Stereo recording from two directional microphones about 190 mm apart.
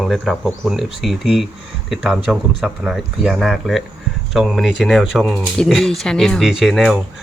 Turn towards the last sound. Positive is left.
turn(degrees=0)  # may be behind; listen again after turning